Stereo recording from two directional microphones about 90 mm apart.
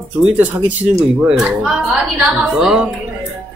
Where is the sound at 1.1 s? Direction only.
Centre (ahead or behind).